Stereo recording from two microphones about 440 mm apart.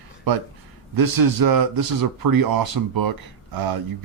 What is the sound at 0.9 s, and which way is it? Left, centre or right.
Speech, right.